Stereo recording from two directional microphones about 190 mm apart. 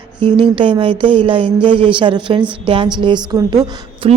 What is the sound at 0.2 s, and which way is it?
A woman's voice, 25° right (ahead or behind).